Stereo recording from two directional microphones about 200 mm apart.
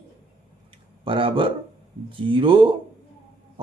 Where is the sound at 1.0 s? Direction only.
25° right (ahead or behind).